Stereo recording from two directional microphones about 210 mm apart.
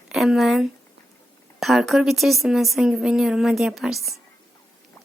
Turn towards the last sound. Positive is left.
turn(degrees=0)  # may be behind; listen again after turning